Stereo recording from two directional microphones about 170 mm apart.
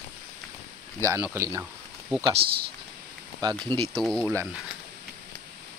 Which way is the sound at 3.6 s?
25° right (ahead or behind).